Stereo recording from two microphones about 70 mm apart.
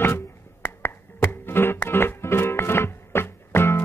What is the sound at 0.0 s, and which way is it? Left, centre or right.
Music, left.